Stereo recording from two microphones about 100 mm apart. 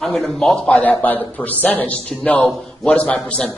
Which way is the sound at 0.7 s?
15° left (ahead or behind).